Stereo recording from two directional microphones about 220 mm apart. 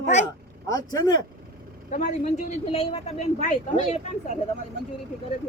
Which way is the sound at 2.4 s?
25° left (ahead or behind).